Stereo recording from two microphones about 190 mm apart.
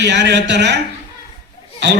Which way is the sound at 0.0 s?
65° right (ahead or behind).